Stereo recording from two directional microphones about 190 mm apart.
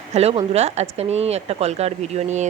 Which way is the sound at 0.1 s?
35° right (ahead or behind).